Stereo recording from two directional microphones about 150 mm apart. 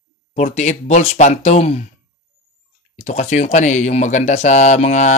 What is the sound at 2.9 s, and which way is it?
Speech, 50° left (ahead or behind).